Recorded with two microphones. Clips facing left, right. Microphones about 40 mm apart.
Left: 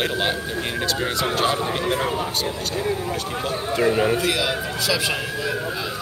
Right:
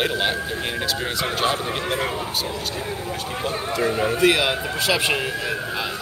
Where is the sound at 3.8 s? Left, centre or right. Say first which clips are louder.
Left 3 dB; centre.